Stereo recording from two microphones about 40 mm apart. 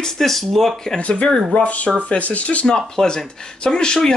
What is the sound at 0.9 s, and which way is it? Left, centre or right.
Speech, left.